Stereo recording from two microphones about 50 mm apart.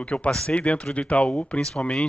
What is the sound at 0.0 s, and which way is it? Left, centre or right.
Speech, left.